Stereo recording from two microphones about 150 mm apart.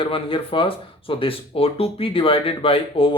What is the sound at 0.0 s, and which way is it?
Speech, 35° left (ahead or behind).